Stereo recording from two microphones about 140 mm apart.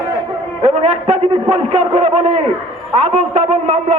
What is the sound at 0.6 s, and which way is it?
A man's voice, 50° right (ahead or behind).